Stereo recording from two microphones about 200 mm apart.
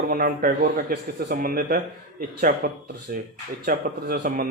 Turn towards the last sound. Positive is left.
turn(degrees=-45)  # may be behind; listen again after turning